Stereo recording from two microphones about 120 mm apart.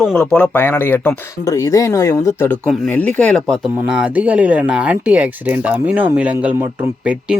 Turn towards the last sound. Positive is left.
turn(degrees=-10)  # may be behind; listen again after turning